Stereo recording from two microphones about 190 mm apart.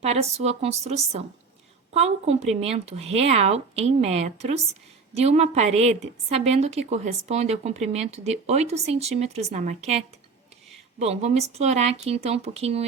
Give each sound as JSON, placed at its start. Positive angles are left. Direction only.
{"t": 0.0, "sound": "speech", "side_deg": -35}
{"t": 11.0, "sound": "speech", "side_deg": -35}